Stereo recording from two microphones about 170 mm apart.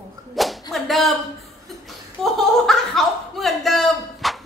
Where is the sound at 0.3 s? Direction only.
Centre (ahead or behind).